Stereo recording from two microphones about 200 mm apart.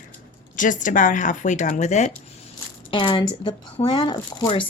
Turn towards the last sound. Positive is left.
turn(degrees=25)  # may be behind; listen again after turning